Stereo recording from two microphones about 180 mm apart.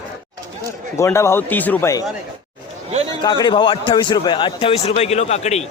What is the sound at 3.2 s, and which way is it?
A man's voice, 25° left (ahead or behind).